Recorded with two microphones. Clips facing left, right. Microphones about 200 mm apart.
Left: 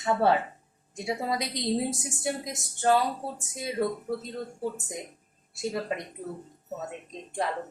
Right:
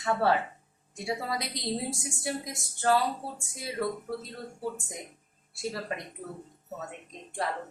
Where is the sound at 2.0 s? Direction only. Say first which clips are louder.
Left 2 dB; 20° left (ahead or behind).